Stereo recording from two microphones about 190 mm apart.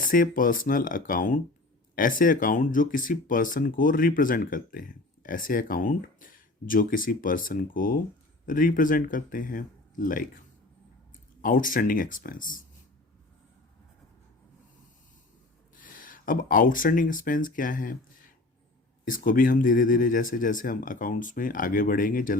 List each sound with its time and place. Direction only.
0.0 s speech: 45° left (ahead or behind)
11.4 s speech: 45° left (ahead or behind)
15.8 s speech: 45° left (ahead or behind)